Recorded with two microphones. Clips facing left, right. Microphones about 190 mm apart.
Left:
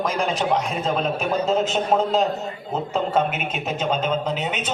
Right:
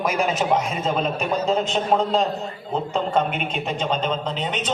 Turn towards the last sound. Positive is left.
turn(degrees=10)  # may be behind; listen again after turning